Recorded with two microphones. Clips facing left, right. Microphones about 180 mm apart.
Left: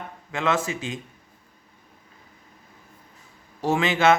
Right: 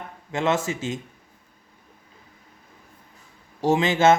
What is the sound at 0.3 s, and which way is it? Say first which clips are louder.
Speech: right 1 dB; 25° right (ahead or behind).